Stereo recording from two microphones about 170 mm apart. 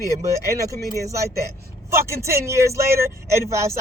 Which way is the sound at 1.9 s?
15° right (ahead or behind).